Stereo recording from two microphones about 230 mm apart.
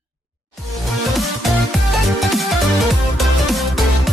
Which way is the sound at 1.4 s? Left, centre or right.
Centre.